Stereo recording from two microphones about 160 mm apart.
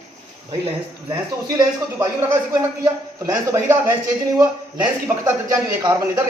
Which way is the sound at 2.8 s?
15° right (ahead or behind).